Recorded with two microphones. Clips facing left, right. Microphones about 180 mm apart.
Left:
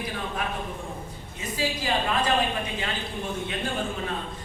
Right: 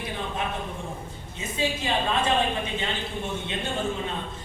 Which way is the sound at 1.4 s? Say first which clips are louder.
Right 1 dB; 25° right (ahead or behind).